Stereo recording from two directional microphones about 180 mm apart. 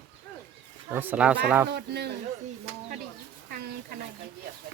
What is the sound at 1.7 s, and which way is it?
Speech, 65° right (ahead or behind).